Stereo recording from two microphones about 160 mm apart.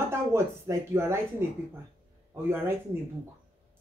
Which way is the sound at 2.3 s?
15° right (ahead or behind).